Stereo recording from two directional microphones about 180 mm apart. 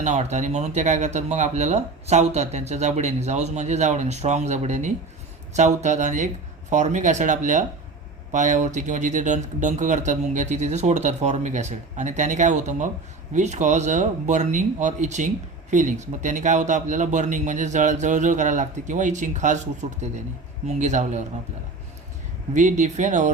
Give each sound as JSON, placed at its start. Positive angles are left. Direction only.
{"t": 0.0, "sound": "speech", "side_deg": -40}
{"t": 22.5, "sound": "speech", "side_deg": -45}